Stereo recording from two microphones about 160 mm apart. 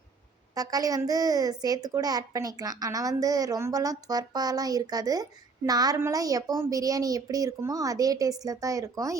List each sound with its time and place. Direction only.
0.5 s a woman's voice: 20° right (ahead or behind)